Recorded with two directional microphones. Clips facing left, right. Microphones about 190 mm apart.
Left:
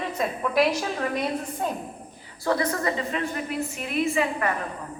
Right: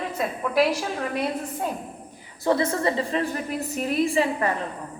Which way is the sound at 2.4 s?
25° right (ahead or behind).